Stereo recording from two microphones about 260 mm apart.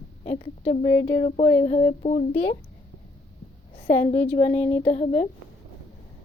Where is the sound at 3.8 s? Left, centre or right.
Left.